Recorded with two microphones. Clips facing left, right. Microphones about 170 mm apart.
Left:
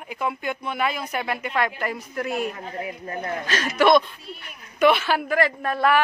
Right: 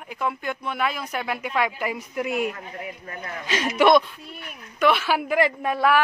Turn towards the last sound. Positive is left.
turn(degrees=-15)  # may be behind; listen again after turning